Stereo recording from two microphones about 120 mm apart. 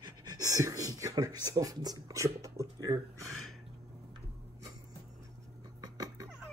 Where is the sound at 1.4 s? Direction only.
30° right (ahead or behind).